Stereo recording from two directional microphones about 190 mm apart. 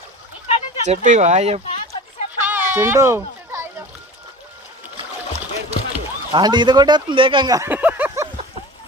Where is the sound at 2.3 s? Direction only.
10° right (ahead or behind).